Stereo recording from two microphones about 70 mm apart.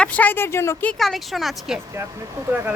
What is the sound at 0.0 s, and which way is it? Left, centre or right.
Speech, left.